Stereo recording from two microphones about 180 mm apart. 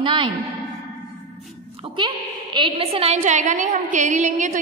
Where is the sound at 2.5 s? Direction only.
30° right (ahead or behind).